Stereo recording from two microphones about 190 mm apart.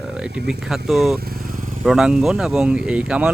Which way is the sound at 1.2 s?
50° right (ahead or behind).